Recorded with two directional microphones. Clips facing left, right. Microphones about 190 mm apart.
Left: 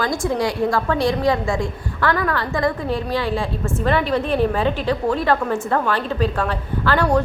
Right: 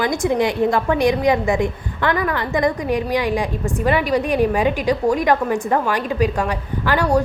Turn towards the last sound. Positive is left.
turn(degrees=-10)  # may be behind; listen again after turning